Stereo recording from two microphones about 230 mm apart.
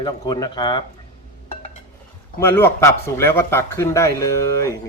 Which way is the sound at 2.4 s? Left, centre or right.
Centre.